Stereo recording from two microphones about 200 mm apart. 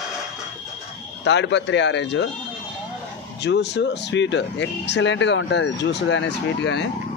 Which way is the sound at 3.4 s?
60° left (ahead or behind).